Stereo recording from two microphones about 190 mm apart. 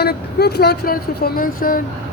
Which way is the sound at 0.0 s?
60° left (ahead or behind).